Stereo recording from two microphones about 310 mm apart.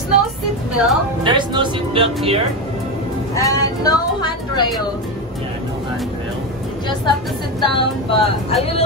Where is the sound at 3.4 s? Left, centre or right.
Centre.